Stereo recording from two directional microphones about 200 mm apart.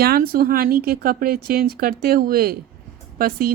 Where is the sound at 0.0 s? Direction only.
50° right (ahead or behind).